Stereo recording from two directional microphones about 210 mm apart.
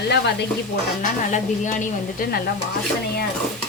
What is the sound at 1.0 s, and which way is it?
A woman's voice, 35° left (ahead or behind).